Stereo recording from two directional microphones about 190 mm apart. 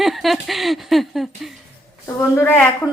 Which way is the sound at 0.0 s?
Centre (ahead or behind).